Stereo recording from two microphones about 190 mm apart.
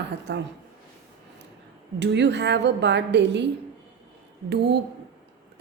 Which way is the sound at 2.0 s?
65° right (ahead or behind).